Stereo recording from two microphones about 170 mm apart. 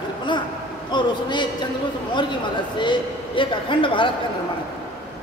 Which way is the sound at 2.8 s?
30° left (ahead or behind).